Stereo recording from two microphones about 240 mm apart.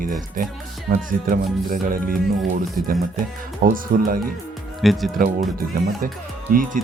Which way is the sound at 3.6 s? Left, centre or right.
Right.